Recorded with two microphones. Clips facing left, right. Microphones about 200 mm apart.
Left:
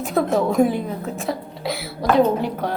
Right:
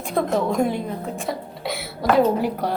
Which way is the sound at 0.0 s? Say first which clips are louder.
Left 2 dB; 5° left (ahead or behind).